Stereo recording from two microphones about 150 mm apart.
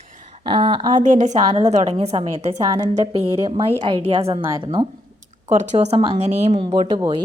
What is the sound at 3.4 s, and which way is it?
A woman's voice, 30° right (ahead or behind).